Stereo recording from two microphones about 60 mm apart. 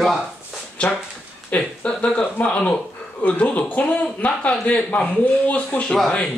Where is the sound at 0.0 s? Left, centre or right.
Centre.